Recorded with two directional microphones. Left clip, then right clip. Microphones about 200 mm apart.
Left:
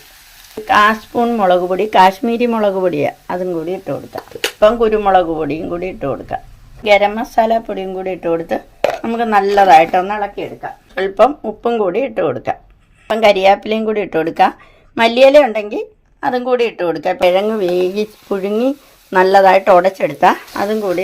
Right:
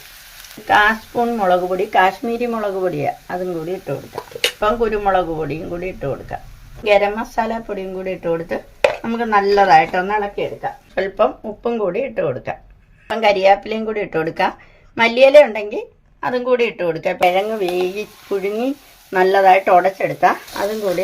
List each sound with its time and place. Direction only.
0.7 s speech: 35° left (ahead or behind)
17.2 s speech: 45° left (ahead or behind)